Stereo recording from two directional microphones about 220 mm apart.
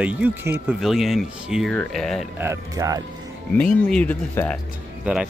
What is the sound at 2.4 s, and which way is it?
Speech, 15° right (ahead or behind).